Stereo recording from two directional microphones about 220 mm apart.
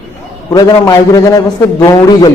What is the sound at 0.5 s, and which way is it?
Speech, 15° left (ahead or behind).